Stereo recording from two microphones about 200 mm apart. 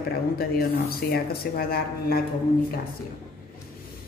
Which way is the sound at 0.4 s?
50° left (ahead or behind).